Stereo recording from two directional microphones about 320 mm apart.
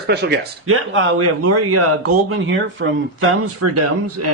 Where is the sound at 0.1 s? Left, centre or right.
Right.